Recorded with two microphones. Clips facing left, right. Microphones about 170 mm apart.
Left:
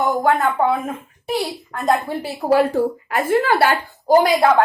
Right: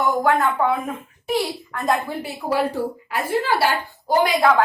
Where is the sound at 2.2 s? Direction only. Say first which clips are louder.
Left 9 dB; 45° left (ahead or behind).